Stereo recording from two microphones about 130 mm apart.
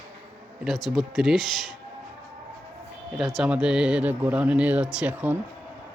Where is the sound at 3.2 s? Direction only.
Centre (ahead or behind).